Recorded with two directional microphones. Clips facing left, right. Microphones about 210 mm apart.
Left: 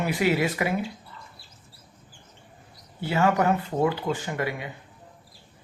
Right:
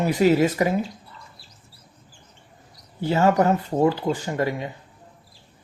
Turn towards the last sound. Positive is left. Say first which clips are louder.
# right 5 dB
turn(degrees=-40)  # may be behind; listen again after turning